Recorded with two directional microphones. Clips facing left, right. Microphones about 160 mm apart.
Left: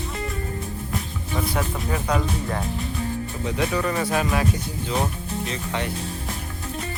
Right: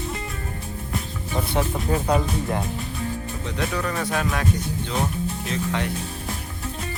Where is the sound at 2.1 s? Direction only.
10° right (ahead or behind).